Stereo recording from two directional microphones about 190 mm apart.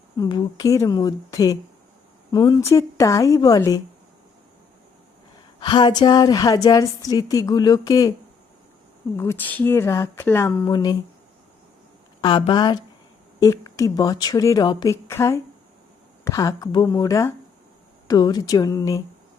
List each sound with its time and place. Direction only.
0.2 s a woman's voice: 25° left (ahead or behind)
5.5 s a woman's voice: 25° left (ahead or behind)
9.1 s a woman's voice: 10° left (ahead or behind)
12.2 s a woman's voice: 25° left (ahead or behind)